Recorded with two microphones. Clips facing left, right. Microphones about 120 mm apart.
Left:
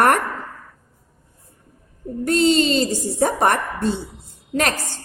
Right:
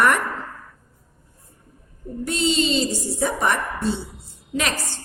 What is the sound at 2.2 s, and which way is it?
A woman's voice, 45° left (ahead or behind).